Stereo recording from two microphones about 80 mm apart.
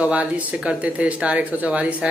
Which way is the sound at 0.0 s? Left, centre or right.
Centre.